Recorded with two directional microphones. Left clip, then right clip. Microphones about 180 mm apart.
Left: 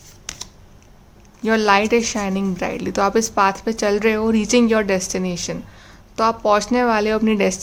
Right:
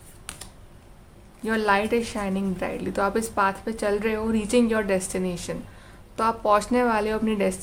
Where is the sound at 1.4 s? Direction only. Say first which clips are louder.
Left 7 dB; 30° left (ahead or behind).